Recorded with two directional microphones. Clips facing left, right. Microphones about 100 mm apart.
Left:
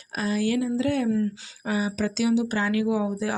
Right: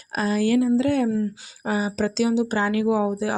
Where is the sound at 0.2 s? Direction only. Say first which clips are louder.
Right 4 dB; 45° right (ahead or behind); by 2.8 s 30° right (ahead or behind).